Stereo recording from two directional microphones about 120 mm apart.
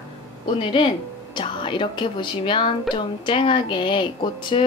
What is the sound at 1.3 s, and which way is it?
Speech, 45° left (ahead or behind).